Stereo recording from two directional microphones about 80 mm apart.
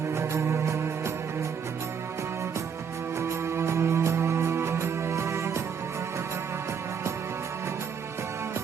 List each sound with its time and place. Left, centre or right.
0.1 s music: right
3.2 s music: right